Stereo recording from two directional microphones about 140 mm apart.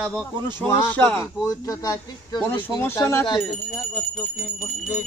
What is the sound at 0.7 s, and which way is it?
Jingle bell, 10° left (ahead or behind).